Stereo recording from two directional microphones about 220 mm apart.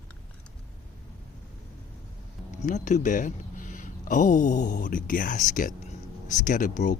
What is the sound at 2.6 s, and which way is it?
Speech, 35° left (ahead or behind).